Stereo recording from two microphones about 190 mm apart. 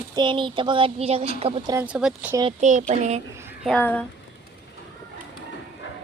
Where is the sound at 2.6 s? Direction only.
40° right (ahead or behind).